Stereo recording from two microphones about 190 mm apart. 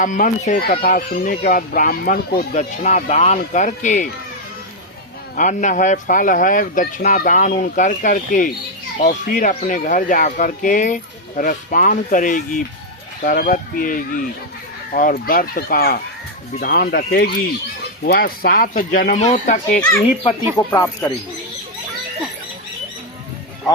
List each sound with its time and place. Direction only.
0.0 s speech: 40° left (ahead or behind)
2.5 s speech: 40° left (ahead or behind)
5.4 s speech: 40° left (ahead or behind)
20.7 s speech: 10° left (ahead or behind)